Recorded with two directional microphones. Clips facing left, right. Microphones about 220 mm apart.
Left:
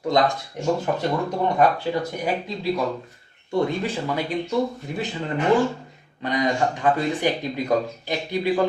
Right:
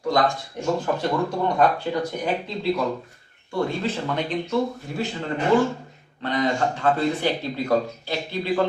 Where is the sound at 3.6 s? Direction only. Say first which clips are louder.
Even; 10° left (ahead or behind).